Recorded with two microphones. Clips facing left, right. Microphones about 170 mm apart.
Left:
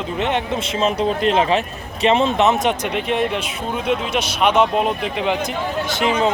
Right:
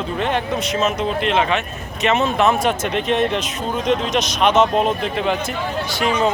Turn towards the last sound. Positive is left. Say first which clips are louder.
# even
turn(degrees=20)  # may be behind; listen again after turning